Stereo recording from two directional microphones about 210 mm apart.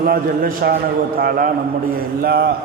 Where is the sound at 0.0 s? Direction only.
45° right (ahead or behind).